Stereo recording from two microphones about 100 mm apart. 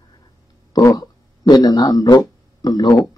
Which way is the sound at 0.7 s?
35° left (ahead or behind).